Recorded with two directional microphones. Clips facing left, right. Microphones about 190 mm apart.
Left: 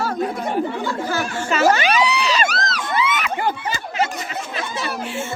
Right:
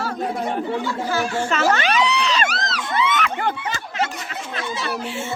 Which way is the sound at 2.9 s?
10° left (ahead or behind).